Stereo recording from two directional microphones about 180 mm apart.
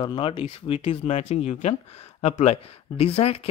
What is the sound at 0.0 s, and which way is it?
Speech, 25° left (ahead or behind).